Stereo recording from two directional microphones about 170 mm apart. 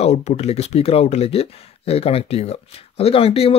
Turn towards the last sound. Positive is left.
turn(degrees=35)  # may be behind; listen again after turning